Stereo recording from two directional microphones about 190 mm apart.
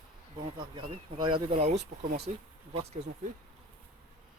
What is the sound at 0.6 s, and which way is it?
Speech, 25° right (ahead or behind).